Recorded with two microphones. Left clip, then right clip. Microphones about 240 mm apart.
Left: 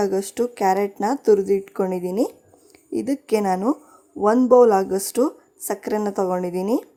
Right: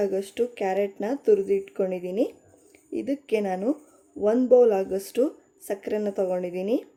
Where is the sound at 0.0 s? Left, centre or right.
Left.